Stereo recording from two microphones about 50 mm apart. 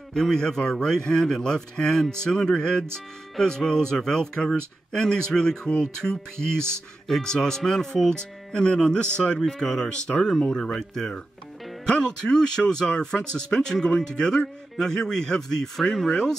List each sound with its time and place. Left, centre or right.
0.1 s speech: centre
9.4 s speech: centre
10.2 s speech: centre